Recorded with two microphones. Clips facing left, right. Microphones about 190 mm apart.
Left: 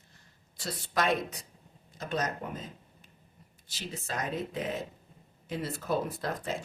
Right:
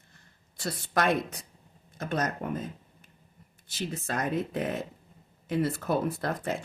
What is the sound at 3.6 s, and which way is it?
Speech, 55° right (ahead or behind).